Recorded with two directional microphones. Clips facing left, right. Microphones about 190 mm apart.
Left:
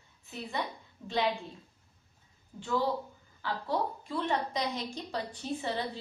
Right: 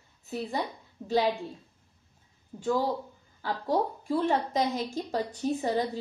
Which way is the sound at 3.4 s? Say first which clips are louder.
Right 4 dB; 40° right (ahead or behind).